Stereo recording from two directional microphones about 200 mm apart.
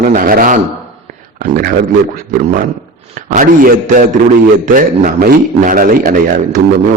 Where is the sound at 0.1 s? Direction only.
45° right (ahead or behind).